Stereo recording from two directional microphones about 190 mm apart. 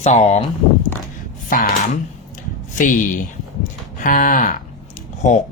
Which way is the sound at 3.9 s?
45° left (ahead or behind).